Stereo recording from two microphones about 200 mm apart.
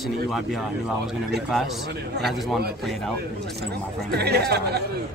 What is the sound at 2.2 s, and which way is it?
Speech, centre (ahead or behind).